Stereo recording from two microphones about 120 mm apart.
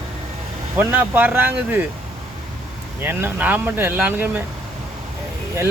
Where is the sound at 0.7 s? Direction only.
15° right (ahead or behind).